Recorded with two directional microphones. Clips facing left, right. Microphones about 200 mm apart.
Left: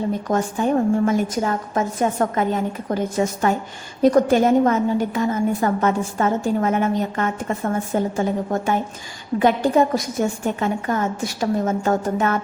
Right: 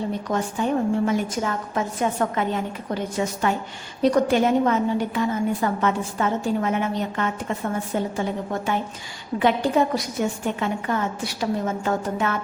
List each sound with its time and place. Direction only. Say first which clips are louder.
0.3 s a woman's voice: left 3 dB; 45° left (ahead or behind)